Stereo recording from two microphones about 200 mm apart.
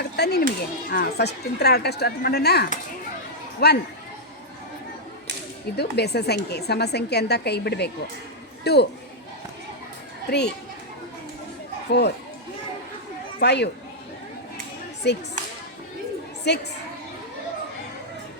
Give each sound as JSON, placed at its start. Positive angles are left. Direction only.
{"t": 0.2, "sound": "speech", "side_deg": 55}
{"t": 5.7, "sound": "speech", "side_deg": 55}
{"t": 10.2, "sound": "speech", "side_deg": 55}
{"t": 11.9, "sound": "speech", "side_deg": 55}
{"t": 13.4, "sound": "speech", "side_deg": 55}
{"t": 15.1, "sound": "speech", "side_deg": 60}
{"t": 16.5, "sound": "speech", "side_deg": 60}